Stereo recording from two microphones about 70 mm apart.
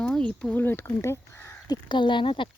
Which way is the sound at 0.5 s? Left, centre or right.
Left.